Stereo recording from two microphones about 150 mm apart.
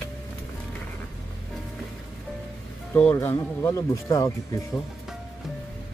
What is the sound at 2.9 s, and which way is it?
Speech, 15° left (ahead or behind).